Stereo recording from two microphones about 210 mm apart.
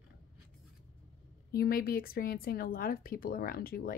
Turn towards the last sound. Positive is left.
turn(degrees=45)  # may be behind; listen again after turning